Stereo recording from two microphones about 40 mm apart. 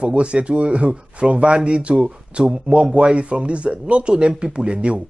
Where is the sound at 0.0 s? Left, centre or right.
Right.